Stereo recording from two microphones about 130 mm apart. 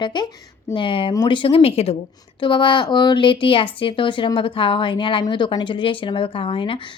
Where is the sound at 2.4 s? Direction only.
40° left (ahead or behind).